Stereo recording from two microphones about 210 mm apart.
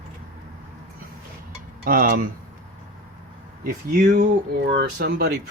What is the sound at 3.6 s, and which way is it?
Speech, 45° right (ahead or behind).